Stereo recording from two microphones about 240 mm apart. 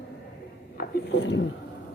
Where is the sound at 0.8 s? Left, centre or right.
Left.